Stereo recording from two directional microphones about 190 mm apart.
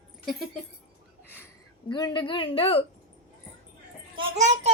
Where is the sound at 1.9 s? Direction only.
25° left (ahead or behind).